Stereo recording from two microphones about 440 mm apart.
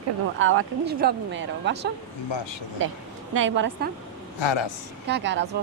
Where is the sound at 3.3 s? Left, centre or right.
Right.